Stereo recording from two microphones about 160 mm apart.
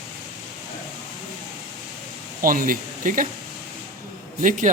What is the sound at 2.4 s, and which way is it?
Speech, 60° right (ahead or behind).